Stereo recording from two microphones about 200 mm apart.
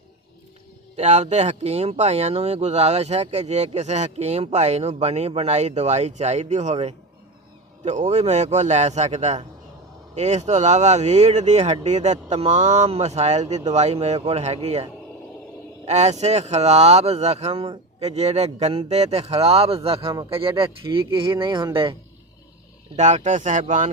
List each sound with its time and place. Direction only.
0.9 s speech: 35° right (ahead or behind)
15.9 s speech: 35° right (ahead or behind)
23.0 s speech: 35° right (ahead or behind)